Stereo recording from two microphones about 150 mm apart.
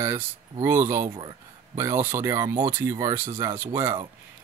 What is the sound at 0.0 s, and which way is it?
Speech, 15° right (ahead or behind).